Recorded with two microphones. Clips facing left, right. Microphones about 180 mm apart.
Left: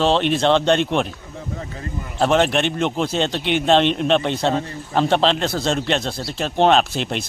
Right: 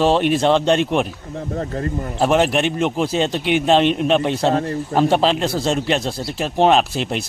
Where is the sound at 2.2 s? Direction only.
5° right (ahead or behind).